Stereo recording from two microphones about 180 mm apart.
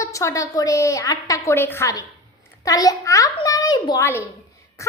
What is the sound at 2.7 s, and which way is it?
A child's voice, 20° left (ahead or behind).